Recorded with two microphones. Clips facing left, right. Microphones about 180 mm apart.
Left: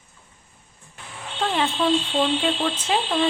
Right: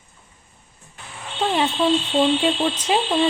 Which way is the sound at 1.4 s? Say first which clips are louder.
Right 3 dB; 20° right (ahead or behind).